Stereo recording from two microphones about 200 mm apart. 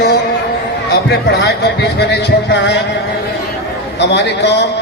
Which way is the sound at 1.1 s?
55° left (ahead or behind).